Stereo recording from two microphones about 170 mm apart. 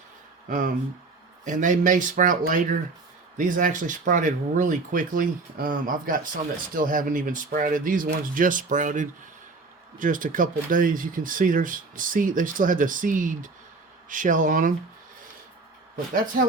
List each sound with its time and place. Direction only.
0.4 s speech: 50° right (ahead or behind)